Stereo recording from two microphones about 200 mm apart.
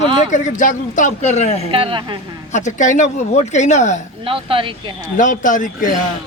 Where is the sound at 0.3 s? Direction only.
35° left (ahead or behind).